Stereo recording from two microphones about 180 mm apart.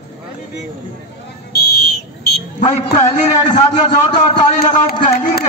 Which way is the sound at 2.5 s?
40° left (ahead or behind).